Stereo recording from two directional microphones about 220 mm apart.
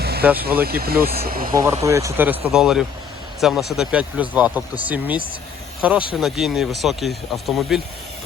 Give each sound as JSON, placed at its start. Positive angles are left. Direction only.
{"t": 0.0, "sound": "vehicle", "side_deg": -45}
{"t": 0.3, "sound": "speech", "side_deg": -45}
{"t": 1.8, "sound": "speech", "side_deg": -15}